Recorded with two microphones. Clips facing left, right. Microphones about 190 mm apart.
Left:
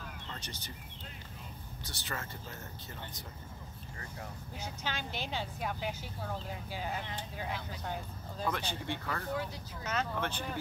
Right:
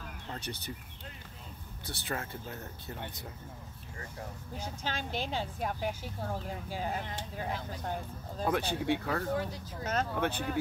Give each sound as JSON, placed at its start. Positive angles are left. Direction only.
{"t": 0.3, "sound": "speech", "side_deg": -60}
{"t": 1.9, "sound": "speech", "side_deg": -60}
{"t": 4.6, "sound": "speech", "side_deg": -45}
{"t": 8.4, "sound": "speech", "side_deg": -55}